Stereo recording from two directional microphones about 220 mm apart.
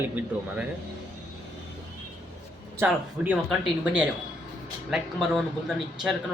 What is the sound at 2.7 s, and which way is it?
Speech, 5° right (ahead or behind).